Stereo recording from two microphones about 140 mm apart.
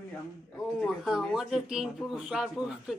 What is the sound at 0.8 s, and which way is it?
Speech, 5° right (ahead or behind).